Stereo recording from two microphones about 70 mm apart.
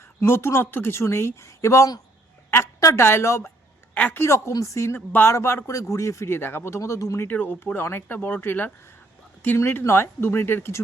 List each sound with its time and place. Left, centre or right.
0.0 s a woman's voice: left
3.9 s a man's voice: left
4.2 s speech: left
4.9 s speech: left
5.3 s speech: left
7.3 s speech: left